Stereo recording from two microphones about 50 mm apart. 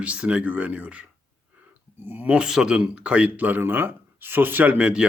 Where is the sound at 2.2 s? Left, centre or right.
Right.